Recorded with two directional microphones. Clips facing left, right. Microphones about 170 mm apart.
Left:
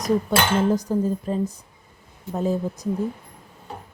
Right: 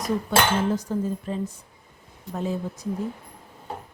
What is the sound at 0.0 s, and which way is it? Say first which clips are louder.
Speech: left 2 dB; 40° left (ahead or behind).